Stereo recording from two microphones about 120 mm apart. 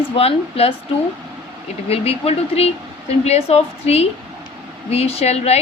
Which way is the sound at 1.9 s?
55° left (ahead or behind).